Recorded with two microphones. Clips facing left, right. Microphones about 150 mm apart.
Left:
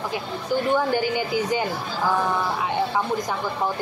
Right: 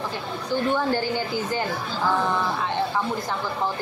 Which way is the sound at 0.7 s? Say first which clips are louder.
Left 2 dB; 15° left (ahead or behind).